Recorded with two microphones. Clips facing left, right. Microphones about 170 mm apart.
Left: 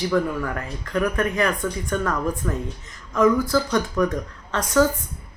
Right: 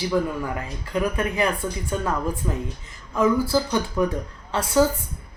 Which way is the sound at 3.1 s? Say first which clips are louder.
Left 2 dB; 10° right (ahead or behind).